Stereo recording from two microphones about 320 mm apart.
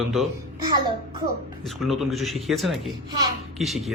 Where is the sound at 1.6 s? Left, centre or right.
Centre.